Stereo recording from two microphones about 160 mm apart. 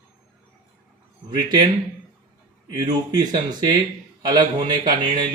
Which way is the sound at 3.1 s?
25° right (ahead or behind).